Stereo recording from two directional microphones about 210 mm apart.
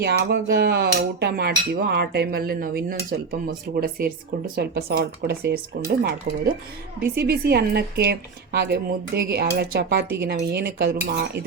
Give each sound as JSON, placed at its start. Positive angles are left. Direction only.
{"t": 0.0, "sound": "dishes", "side_deg": -50}